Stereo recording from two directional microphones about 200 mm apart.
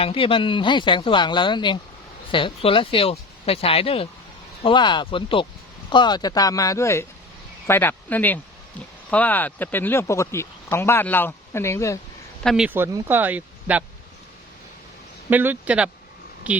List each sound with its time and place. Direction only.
0.0 s speech: 25° left (ahead or behind)
12.4 s speech: centre (ahead or behind)
15.3 s a woman's voice: 10° right (ahead or behind)